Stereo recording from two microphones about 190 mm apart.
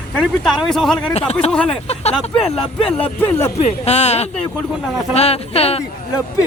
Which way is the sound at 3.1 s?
10° left (ahead or behind).